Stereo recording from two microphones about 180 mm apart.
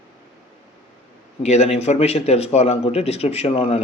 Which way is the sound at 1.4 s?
40° left (ahead or behind).